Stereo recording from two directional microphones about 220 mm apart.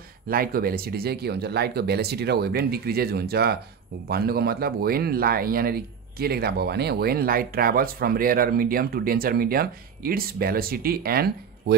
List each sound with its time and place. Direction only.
0.3 s speech: 40° right (ahead or behind)